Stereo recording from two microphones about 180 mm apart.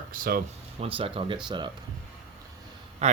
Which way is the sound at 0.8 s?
30° right (ahead or behind).